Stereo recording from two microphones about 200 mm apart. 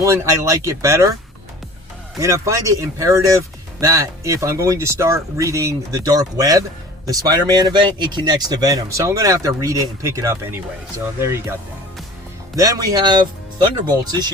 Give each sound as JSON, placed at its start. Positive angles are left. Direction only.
{"t": 0.0, "sound": "speech", "side_deg": -15}
{"t": 2.1, "sound": "speech", "side_deg": -15}
{"t": 12.5, "sound": "speech", "side_deg": -20}